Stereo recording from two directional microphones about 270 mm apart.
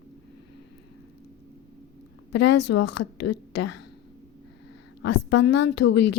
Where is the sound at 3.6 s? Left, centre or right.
Left.